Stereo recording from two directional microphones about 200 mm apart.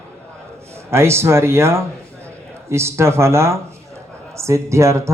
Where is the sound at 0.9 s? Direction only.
15° right (ahead or behind).